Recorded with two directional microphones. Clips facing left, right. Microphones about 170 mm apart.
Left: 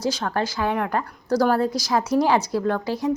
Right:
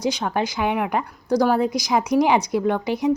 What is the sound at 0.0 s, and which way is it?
A woman's voice, 15° right (ahead or behind).